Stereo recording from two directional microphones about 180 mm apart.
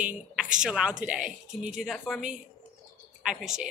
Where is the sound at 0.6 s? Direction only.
5° right (ahead or behind).